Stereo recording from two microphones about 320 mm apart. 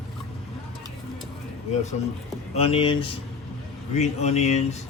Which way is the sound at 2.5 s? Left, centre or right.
Centre.